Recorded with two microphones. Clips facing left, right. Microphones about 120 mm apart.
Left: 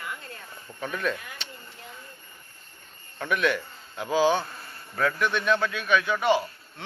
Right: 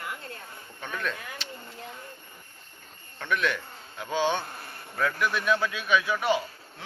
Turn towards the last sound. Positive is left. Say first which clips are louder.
# left 3 dB
turn(degrees=0)  # may be behind; listen again after turning